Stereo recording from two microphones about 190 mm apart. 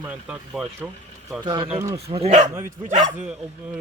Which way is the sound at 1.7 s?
15° right (ahead or behind).